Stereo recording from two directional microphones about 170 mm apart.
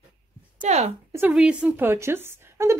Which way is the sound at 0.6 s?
40° right (ahead or behind).